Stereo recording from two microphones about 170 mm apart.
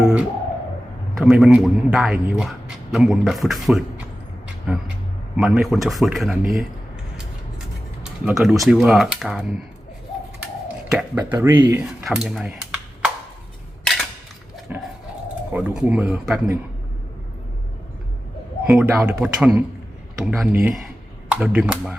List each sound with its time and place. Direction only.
0.0 s music: 5° right (ahead or behind)
1.1 s a man's voice: 5° right (ahead or behind)
8.2 s a man's voice: 5° right (ahead or behind)
10.9 s a man's voice: 10° right (ahead or behind)
14.7 s dog: 10° right (ahead or behind)
15.5 s a man's voice: 5° right (ahead or behind)
18.6 s a man's voice: 10° right (ahead or behind)